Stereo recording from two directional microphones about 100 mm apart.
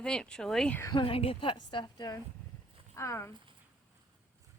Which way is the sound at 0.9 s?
60° left (ahead or behind).